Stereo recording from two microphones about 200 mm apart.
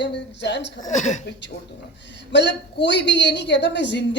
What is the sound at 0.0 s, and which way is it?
Speech, 60° left (ahead or behind).